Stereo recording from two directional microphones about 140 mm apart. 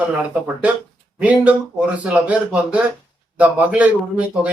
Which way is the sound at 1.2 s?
10° right (ahead or behind).